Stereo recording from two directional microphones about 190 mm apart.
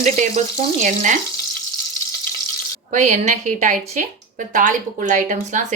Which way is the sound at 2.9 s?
40° right (ahead or behind).